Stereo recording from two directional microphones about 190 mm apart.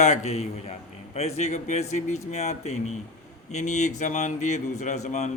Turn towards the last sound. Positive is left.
turn(degrees=35)  # may be behind; listen again after turning